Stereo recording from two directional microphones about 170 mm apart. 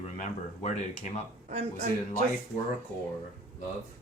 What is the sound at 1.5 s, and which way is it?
Speech, 40° right (ahead or behind).